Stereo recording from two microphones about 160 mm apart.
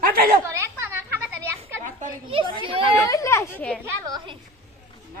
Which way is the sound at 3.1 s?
20° left (ahead or behind).